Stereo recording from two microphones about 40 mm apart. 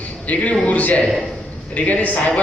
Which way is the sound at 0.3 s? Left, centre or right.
Left.